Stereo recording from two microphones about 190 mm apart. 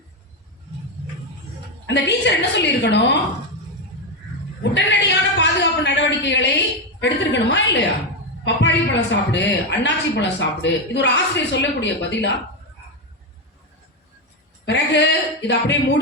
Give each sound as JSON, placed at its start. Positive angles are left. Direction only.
{"t": 1.9, "sound": "a woman's voice", "side_deg": 65}
{"t": 4.6, "sound": "a woman's voice", "side_deg": 70}
{"t": 5.4, "sound": "a sound", "side_deg": 65}
{"t": 7.0, "sound": "a woman's voice", "side_deg": 70}
{"t": 14.7, "sound": "a woman's voice", "side_deg": 65}